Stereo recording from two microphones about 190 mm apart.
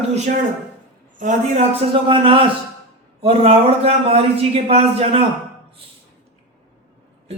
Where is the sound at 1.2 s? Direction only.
40° right (ahead or behind).